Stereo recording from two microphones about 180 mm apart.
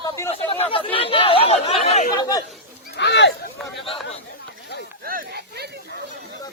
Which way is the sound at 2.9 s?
70° left (ahead or behind).